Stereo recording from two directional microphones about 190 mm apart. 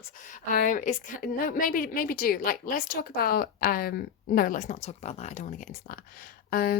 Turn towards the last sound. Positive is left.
turn(degrees=50)  # may be behind; listen again after turning